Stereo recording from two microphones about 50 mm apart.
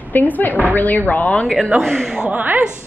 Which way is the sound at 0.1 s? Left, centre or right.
Left.